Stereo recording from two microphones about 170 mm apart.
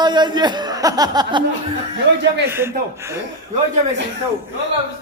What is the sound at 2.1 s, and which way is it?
Speech, 90° right.